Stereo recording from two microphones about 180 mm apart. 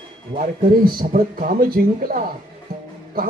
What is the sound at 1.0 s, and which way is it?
Speech, 50° right (ahead or behind).